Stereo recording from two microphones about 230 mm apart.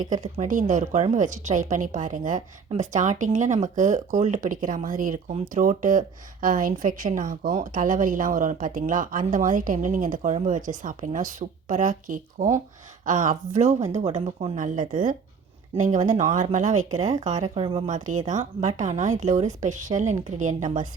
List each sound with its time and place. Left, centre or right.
0.0 s a woman's voice: right